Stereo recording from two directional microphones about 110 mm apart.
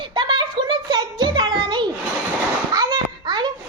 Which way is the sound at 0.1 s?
45° right (ahead or behind).